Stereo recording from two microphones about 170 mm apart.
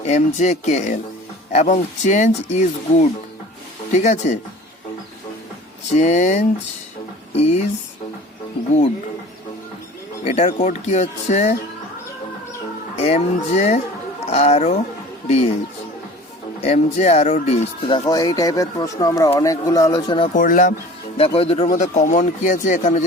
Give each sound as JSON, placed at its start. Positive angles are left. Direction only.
{"t": 0.0, "sound": "speech", "side_deg": 40}
{"t": 6.0, "sound": "speech", "side_deg": 45}
{"t": 10.2, "sound": "speech", "side_deg": 45}
{"t": 13.0, "sound": "speech", "side_deg": 40}
{"t": 16.6, "sound": "speech", "side_deg": 40}
{"t": 20.3, "sound": "speech", "side_deg": 50}
{"t": 21.2, "sound": "speech", "side_deg": 35}